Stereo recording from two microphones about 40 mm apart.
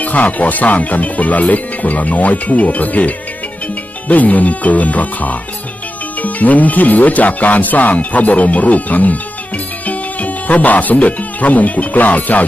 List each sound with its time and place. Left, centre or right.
0.0 s speech: left
4.1 s speech: left